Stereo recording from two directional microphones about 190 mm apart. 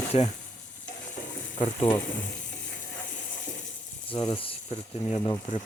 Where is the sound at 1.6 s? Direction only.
30° left (ahead or behind).